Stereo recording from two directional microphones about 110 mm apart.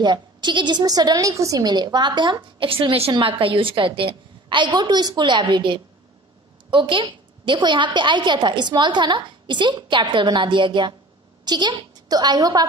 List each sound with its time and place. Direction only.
0.0 s a woman's voice: 45° right (ahead or behind)